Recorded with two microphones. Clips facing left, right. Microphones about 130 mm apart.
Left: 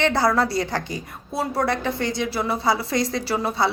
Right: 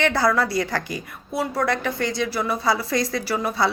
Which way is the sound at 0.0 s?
25° left (ahead or behind).